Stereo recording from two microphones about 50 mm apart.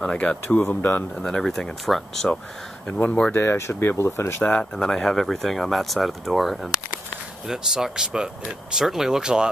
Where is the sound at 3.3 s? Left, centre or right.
Left.